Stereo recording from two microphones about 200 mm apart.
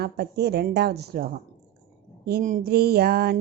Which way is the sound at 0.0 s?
55° right (ahead or behind).